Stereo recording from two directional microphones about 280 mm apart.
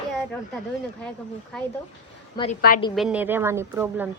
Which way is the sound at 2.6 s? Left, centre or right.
Left.